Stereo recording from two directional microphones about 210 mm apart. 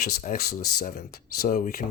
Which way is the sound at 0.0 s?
35° left (ahead or behind).